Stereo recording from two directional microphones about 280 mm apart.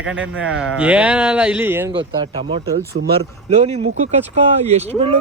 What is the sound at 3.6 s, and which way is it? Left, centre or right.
Speech, right.